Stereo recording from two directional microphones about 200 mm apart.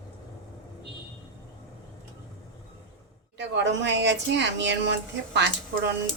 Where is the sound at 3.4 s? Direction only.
60° right (ahead or behind).